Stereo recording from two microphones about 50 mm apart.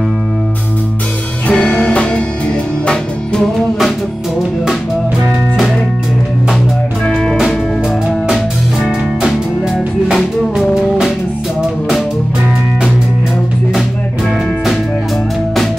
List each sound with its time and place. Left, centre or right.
1.5 s music: centre
7.1 s music: centre
10.1 s music: centre